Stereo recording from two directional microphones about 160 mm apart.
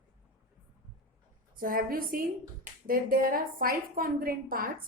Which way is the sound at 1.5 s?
60° right (ahead or behind).